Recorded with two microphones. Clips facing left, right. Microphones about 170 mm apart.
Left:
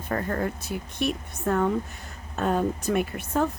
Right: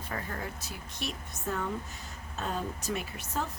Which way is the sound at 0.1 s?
55° left (ahead or behind).